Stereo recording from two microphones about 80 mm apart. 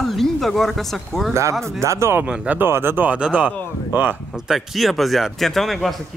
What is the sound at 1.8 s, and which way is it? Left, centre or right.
Speech, right.